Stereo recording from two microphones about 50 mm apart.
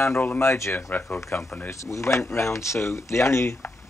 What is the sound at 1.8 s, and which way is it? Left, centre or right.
Speech, left.